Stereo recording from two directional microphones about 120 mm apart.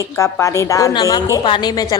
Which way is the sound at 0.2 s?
25° left (ahead or behind).